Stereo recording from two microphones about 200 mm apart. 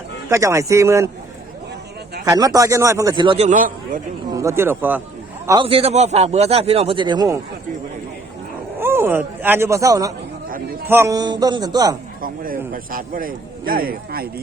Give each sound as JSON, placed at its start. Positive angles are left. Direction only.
{"t": 0.3, "sound": "a man's voice", "side_deg": -15}
{"t": 2.2, "sound": "a man's voice", "side_deg": -15}
{"t": 4.3, "sound": "a man's voice", "side_deg": -15}
{"t": 5.5, "sound": "a man's voice", "side_deg": -25}
{"t": 8.8, "sound": "a man's voice", "side_deg": -10}
{"t": 12.2, "sound": "speech", "side_deg": -45}